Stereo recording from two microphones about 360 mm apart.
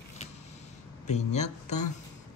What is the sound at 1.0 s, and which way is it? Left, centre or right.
Speech, centre.